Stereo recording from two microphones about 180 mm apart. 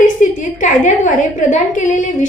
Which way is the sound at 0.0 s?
45° left (ahead or behind).